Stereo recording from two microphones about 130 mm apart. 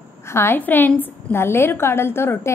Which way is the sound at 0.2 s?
20° left (ahead or behind).